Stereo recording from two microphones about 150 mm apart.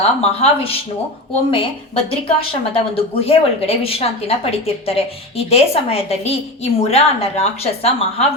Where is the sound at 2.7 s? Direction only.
40° left (ahead or behind).